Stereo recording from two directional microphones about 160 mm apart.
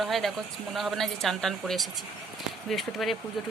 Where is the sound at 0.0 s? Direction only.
Centre (ahead or behind).